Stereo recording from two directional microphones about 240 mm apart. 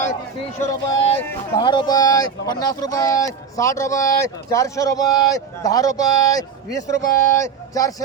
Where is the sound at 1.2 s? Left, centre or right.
Centre.